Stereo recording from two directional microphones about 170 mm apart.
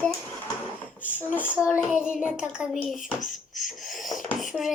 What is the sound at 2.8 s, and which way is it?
Speech, centre (ahead or behind).